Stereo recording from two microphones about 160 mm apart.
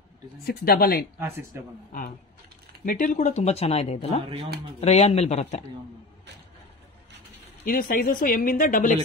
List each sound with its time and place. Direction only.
0.5 s speech: 70° left (ahead or behind)
1.2 s speech: 15° right (ahead or behind)
1.9 s speech: 60° left (ahead or behind); by 5.7 s 45° left (ahead or behind)
7.6 s speech: 65° left (ahead or behind)